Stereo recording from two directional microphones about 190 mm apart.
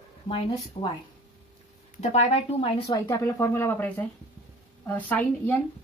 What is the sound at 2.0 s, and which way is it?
Speech, 35° left (ahead or behind).